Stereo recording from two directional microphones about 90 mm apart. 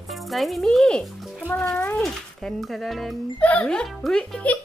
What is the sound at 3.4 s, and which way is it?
Speech, 15° left (ahead or behind).